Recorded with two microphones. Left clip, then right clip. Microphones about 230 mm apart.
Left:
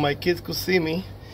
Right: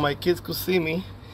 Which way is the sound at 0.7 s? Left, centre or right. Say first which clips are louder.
Left 1 dB; centre.